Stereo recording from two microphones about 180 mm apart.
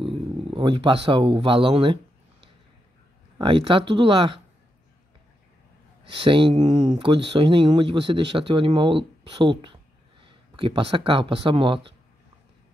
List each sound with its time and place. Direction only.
0.0 s speech: 30° right (ahead or behind)
3.3 s speech: 30° right (ahead or behind)
6.1 s speech: 30° right (ahead or behind)
6.8 s speech: 25° right (ahead or behind)